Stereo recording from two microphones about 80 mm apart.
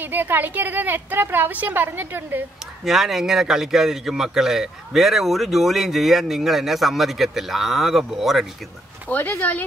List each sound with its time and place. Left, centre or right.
0.0 s a woman's voice: right
2.8 s speech: centre
9.1 s speech: left